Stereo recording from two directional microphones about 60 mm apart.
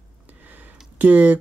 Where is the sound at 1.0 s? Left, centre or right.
Right.